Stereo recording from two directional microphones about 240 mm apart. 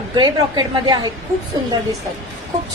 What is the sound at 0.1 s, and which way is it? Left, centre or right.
Speech, centre.